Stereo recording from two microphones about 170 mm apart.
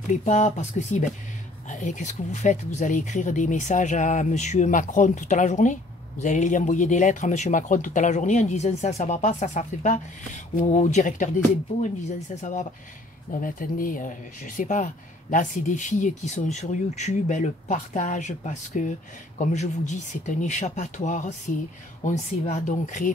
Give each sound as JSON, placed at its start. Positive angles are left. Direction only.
{"t": 0.2, "sound": "speech", "side_deg": 45}
{"t": 12.4, "sound": "speech", "side_deg": 45}